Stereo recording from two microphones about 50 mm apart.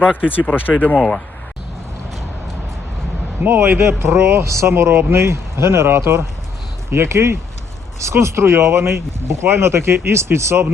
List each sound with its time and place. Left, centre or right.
0.0 s speech: centre
0.3 s speech: left
3.4 s speech: right